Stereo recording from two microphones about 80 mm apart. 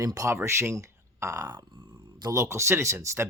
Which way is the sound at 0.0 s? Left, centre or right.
Right.